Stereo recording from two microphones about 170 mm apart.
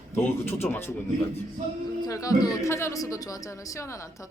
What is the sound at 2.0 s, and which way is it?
Speech, 20° left (ahead or behind).